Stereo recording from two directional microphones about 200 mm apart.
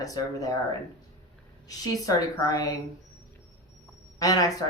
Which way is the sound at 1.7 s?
15° left (ahead or behind).